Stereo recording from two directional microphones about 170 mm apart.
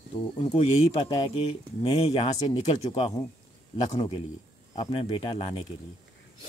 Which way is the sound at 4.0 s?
30° left (ahead or behind).